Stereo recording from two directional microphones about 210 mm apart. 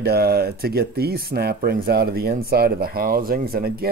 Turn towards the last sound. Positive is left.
turn(degrees=-45)  # may be behind; listen again after turning